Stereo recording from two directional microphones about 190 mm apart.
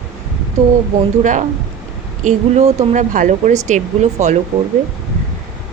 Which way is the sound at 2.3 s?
35° right (ahead or behind).